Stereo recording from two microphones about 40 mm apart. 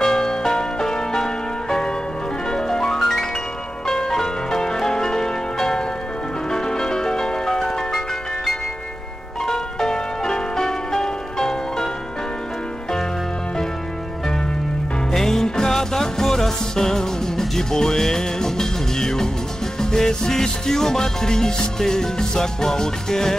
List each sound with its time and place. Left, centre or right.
0.0 s music: centre
9.5 s music: centre
15.1 s music: centre